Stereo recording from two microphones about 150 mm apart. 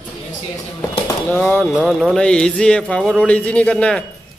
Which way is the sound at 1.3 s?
5° left (ahead or behind).